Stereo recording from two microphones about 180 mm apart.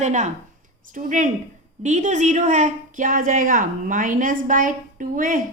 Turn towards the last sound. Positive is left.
turn(degrees=-50)  # may be behind; listen again after turning